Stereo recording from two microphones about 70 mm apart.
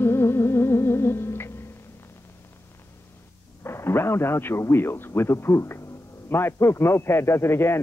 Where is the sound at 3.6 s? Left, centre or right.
Left.